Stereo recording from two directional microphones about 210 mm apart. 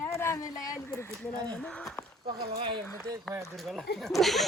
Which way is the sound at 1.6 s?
5° left (ahead or behind).